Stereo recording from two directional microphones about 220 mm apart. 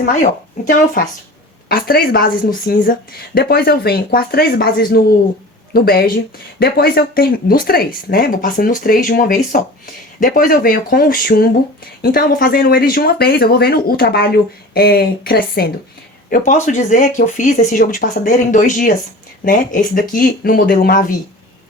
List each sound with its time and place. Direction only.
1.7 s speech: 40° left (ahead or behind)